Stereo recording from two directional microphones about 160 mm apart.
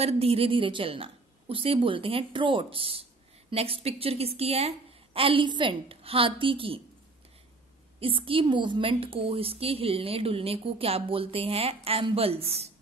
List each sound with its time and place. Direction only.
0.0 s a woman's voice: 35° right (ahead or behind)
8.0 s a woman's voice: 35° right (ahead or behind)